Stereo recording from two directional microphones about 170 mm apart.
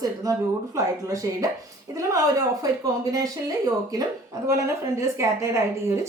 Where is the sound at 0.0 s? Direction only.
20° right (ahead or behind).